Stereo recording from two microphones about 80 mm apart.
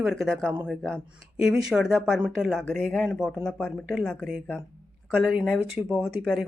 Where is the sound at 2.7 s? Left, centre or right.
Centre.